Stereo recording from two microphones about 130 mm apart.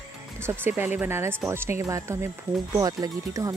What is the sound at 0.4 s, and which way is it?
Speech, 15° right (ahead or behind).